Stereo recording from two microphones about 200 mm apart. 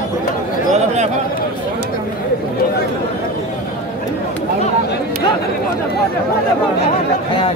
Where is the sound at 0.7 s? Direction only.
35° right (ahead or behind).